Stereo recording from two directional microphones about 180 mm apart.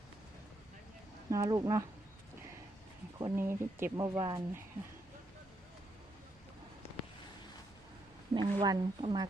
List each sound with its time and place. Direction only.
1.3 s speech: 20° right (ahead or behind)
3.2 s speech: 15° right (ahead or behind)
8.3 s speech: 25° right (ahead or behind)